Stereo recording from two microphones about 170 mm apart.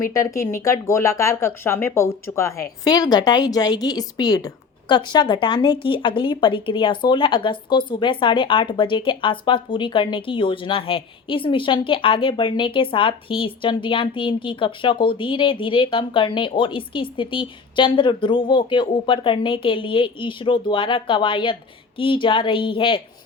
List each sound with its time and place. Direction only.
0.0 s speech: 20° left (ahead or behind)